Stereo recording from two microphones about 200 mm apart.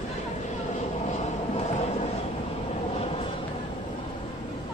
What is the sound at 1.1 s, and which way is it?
Vehicle, 35° left (ahead or behind).